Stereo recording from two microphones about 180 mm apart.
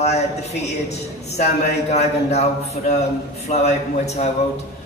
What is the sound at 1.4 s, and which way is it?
A man's voice, 35° left (ahead or behind).